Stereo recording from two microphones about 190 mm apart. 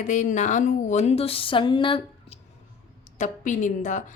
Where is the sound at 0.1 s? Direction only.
40° left (ahead or behind).